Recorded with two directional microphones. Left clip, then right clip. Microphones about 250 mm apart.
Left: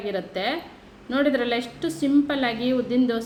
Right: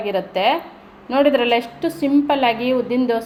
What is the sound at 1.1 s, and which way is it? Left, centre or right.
A woman's voice, right.